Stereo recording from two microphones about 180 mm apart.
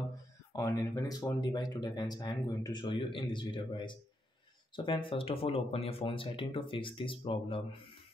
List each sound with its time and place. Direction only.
0.5 s speech: 20° left (ahead or behind)